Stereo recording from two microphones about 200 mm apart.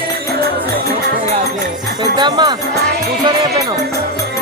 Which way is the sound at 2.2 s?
20° right (ahead or behind).